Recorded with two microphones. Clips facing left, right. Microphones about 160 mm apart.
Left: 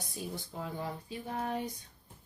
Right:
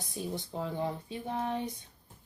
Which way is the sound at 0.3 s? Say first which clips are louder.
Right 7 dB; 25° right (ahead or behind).